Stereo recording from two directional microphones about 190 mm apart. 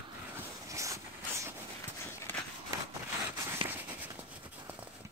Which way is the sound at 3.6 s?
10° right (ahead or behind).